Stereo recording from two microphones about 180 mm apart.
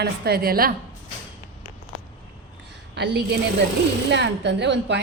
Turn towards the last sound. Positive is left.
turn(degrees=-75)  # may be behind; listen again after turning